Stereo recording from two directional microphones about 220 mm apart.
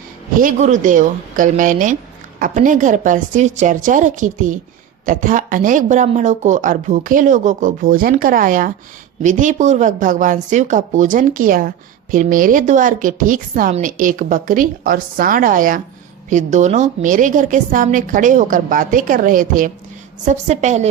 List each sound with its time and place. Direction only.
0.3 s speech: 35° right (ahead or behind)